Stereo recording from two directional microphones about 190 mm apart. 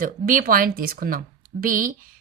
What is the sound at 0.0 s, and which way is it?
A woman's voice, 45° right (ahead or behind).